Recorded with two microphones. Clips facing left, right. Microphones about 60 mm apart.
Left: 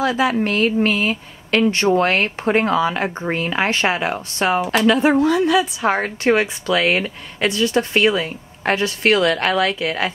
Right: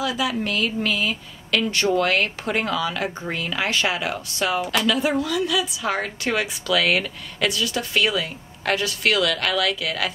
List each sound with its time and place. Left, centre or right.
0.0 s a woman's voice: left